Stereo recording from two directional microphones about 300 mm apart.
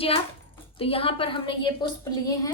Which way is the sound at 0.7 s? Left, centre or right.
Centre.